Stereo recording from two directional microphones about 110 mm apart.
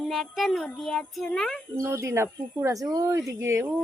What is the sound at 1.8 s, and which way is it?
Speech, 25° right (ahead or behind).